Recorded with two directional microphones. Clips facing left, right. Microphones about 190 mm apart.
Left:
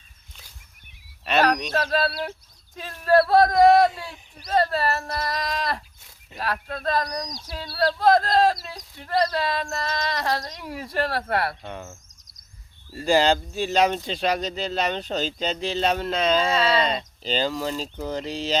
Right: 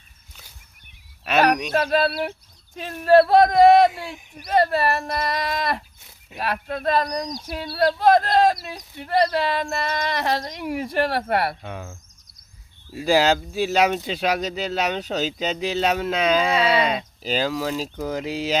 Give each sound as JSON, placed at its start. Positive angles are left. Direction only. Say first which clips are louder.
{"t": 1.2, "sound": "speech", "louder": "right 2 dB", "side_deg": -10}
{"t": 11.6, "sound": "speech", "louder": "right 1 dB", "side_deg": 0}